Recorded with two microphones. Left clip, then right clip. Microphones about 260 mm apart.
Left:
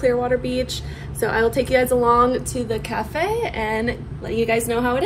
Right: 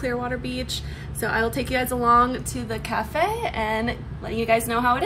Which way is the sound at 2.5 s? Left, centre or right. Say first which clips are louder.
Left 6 dB; right.